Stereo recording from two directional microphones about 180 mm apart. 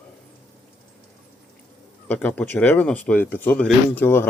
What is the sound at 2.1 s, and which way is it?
Speech, 10° left (ahead or behind).